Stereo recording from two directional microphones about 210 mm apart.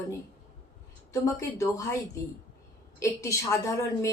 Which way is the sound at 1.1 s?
15° left (ahead or behind).